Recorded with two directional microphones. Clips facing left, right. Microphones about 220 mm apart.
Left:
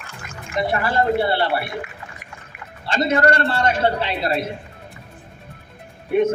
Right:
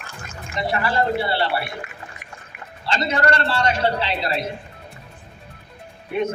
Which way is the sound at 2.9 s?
50° left (ahead or behind).